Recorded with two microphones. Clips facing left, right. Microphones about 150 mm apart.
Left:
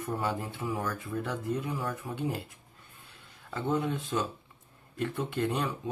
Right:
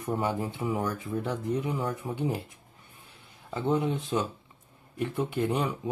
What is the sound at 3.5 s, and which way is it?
Speech, 15° right (ahead or behind).